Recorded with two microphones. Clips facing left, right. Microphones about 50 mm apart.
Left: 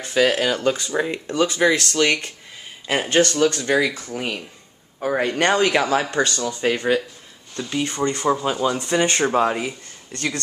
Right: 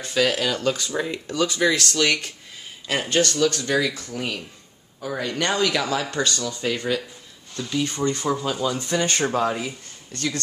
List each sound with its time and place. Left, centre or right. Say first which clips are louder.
0.0 s speech: left 3 dB; centre
5.0 s speech: left 6 dB; left